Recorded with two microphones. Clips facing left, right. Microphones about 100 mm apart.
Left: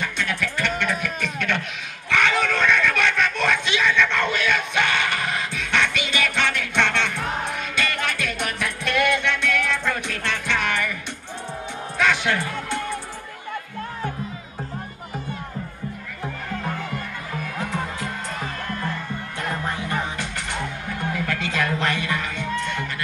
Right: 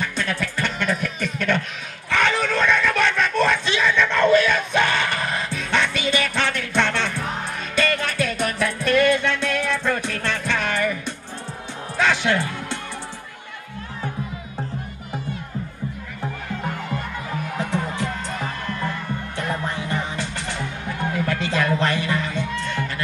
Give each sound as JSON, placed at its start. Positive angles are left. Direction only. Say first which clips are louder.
{"t": 0.2, "sound": "music", "louder": "even", "side_deg": -35}
{"t": 1.2, "sound": "a sound", "louder": "right 3 dB", "side_deg": -40}
{"t": 7.7, "sound": "music", "louder": "right 6 dB", "side_deg": -35}
{"t": 12.0, "sound": "music", "louder": "right 1 dB", "side_deg": -30}
{"t": 20.2, "sound": "music", "louder": "right 1 dB", "side_deg": -30}